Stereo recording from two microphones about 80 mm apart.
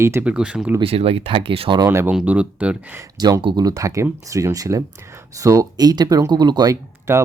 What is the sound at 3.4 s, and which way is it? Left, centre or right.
Speech, right.